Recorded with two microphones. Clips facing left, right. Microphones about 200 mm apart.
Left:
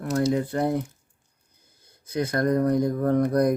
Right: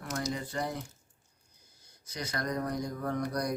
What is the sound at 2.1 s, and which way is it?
Speech, 55° left (ahead or behind).